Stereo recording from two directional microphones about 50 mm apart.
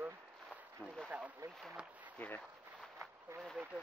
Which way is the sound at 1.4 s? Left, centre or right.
Right.